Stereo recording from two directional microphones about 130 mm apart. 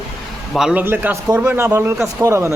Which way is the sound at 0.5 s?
5° right (ahead or behind).